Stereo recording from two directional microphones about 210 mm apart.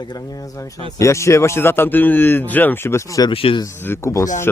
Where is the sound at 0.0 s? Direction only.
20° left (ahead or behind).